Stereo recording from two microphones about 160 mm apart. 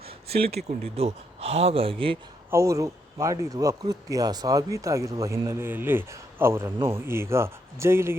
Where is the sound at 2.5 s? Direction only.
20° right (ahead or behind).